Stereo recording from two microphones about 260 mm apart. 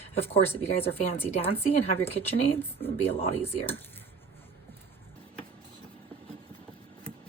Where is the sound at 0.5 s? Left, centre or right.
Left.